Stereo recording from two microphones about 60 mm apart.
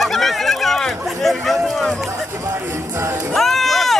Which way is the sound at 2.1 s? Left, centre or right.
Right.